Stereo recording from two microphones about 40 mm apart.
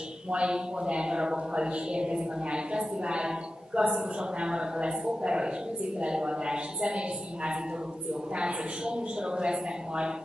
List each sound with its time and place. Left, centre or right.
0.3 s speech: right